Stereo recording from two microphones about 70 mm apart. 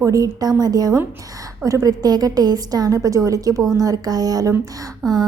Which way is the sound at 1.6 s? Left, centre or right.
Right.